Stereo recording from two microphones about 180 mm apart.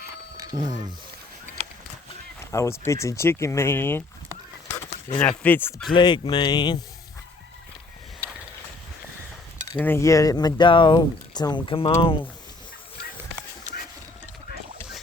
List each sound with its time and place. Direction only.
0.3 s speech: 20° right (ahead or behind)
2.4 s speech: 15° left (ahead or behind)
5.4 s speech: 10° left (ahead or behind)
5.9 s speech: 25° left (ahead or behind)
9.7 s speech: 10° left (ahead or behind); by 11.9 s 30° left (ahead or behind)
11.9 s speech: 40° left (ahead or behind)